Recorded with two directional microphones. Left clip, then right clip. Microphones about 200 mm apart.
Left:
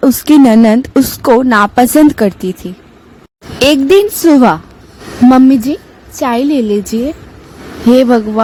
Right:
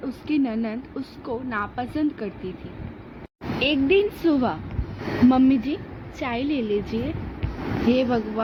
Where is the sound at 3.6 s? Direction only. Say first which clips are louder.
Left 13 dB; 75° left (ahead or behind).